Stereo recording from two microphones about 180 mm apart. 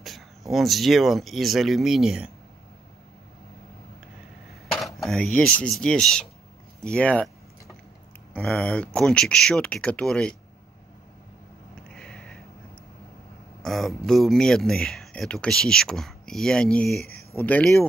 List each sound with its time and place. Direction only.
0.0 s speech: centre (ahead or behind)
4.7 s speech: centre (ahead or behind)
6.8 s a sound: 5° left (ahead or behind)
8.3 s speech: 5° left (ahead or behind)
11.9 s sniff: 5° left (ahead or behind)
13.6 s speech: centre (ahead or behind)
17.0 s speech: 60° left (ahead or behind)
17.4 s speech: 10° left (ahead or behind)